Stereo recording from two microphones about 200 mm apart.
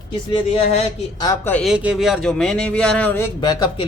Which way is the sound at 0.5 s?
30° left (ahead or behind).